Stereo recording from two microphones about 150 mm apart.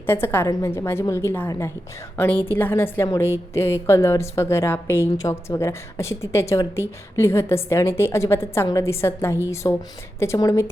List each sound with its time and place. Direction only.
0.0 s a woman's voice: 15° left (ahead or behind)